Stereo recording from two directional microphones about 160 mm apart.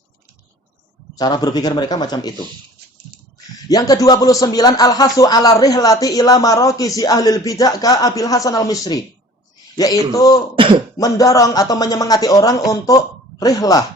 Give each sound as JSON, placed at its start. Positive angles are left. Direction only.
{"t": 1.1, "sound": "a man's voice", "side_deg": 25}
{"t": 3.7, "sound": "a man's voice", "side_deg": 25}